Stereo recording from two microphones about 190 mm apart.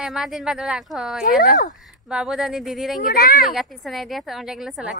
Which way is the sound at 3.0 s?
50° left (ahead or behind).